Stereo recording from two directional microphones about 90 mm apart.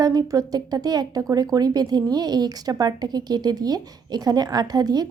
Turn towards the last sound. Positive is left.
turn(degrees=-45)  # may be behind; listen again after turning